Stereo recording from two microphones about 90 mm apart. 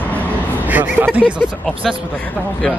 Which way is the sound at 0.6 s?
20° right (ahead or behind).